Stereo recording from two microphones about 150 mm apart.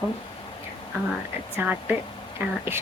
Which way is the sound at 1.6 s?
15° right (ahead or behind).